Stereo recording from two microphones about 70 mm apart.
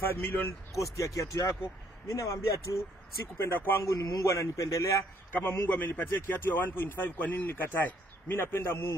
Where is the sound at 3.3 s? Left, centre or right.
Left.